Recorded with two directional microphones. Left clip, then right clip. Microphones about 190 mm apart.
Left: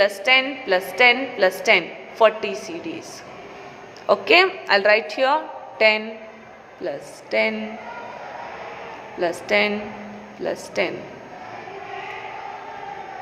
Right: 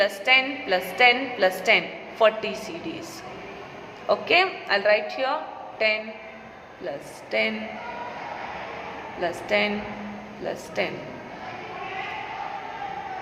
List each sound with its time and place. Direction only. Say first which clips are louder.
0.0 s a woman's voice: left 3 dB; 20° left (ahead or behind)
4.0 s a woman's voice: left 5 dB; 25° left (ahead or behind)
6.8 s a woman's voice: left 4 dB; 20° left (ahead or behind)
9.2 s a woman's voice: left 4 dB; 25° left (ahead or behind)